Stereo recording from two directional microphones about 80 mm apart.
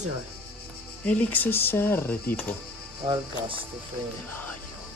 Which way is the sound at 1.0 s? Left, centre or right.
Centre.